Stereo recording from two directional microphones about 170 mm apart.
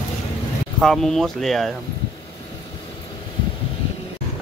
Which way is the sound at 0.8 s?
Centre (ahead or behind).